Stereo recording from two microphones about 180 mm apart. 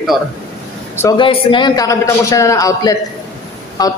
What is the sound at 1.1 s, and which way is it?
A man's voice, 30° left (ahead or behind).